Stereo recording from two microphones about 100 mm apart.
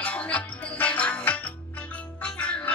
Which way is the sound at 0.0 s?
15° left (ahead or behind).